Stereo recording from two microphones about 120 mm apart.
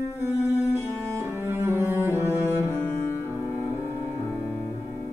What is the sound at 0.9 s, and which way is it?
Music, 20° right (ahead or behind).